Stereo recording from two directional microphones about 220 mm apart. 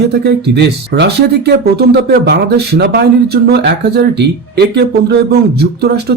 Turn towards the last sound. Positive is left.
turn(degrees=-45)  # may be behind; listen again after turning